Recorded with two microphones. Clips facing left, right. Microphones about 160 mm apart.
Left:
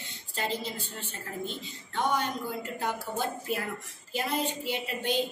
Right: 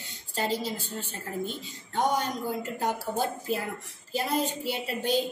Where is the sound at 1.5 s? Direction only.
40° right (ahead or behind).